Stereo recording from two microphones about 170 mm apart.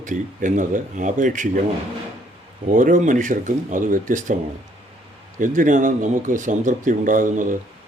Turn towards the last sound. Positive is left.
turn(degrees=-50)  # may be behind; listen again after turning